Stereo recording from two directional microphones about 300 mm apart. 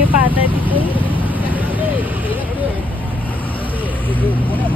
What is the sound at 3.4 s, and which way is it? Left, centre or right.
Vehicle, centre.